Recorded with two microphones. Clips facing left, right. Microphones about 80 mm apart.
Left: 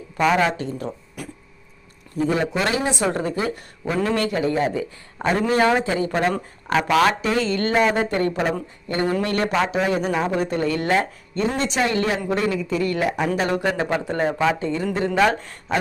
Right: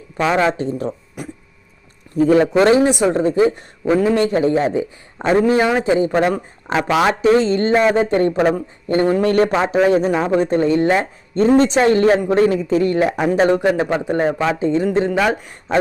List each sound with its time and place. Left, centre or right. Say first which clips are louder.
0.3 s a man's voice: right 4 dB; right
2.4 s speech: right 10 dB; right
2.9 s a man's voice: right 7 dB; centre
7.2 s a man's voice: right 8 dB; right
10.1 s a man's voice: right 6 dB; right
11.3 s a man's voice: right 9 dB; right; by 15.5 s centre